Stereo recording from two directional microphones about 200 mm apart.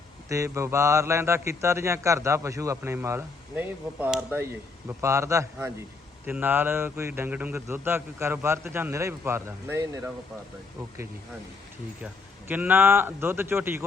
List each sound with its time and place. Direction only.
0.3 s speech: 15° right (ahead or behind)
12.5 s speech: 10° right (ahead or behind)